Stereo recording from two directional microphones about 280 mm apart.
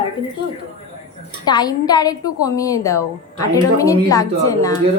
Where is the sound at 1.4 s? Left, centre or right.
Centre.